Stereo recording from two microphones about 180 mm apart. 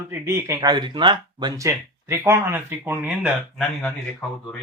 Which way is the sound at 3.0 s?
Centre (ahead or behind).